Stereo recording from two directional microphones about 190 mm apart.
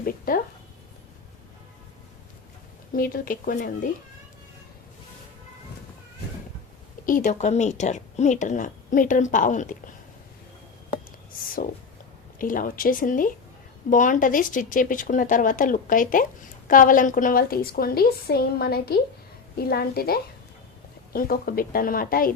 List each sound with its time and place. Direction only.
0.0 s speech: 45° left (ahead or behind)
2.9 s speech: 50° left (ahead or behind)
7.0 s a woman's voice: 45° left (ahead or behind)
12.4 s a woman's voice: 45° left (ahead or behind)